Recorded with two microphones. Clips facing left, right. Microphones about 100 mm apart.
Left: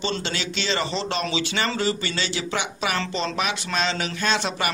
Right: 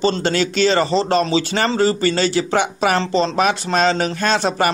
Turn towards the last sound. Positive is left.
turn(degrees=-40)  # may be behind; listen again after turning